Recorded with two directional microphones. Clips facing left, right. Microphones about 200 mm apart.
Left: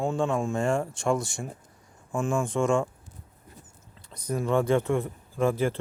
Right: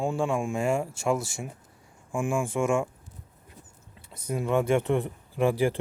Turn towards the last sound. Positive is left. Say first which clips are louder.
# right 1 dB
turn(degrees=-15)  # may be behind; listen again after turning